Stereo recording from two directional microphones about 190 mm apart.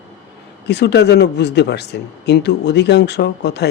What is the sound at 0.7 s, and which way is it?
Speech, 65° left (ahead or behind).